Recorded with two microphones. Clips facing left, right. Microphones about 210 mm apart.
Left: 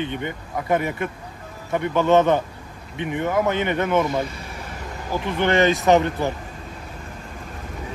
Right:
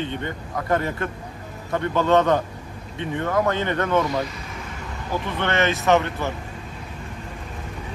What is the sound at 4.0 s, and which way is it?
Mantra, 25° left (ahead or behind).